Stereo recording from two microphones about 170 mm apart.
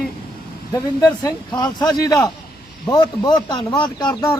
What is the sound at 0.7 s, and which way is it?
Speech, 20° left (ahead or behind).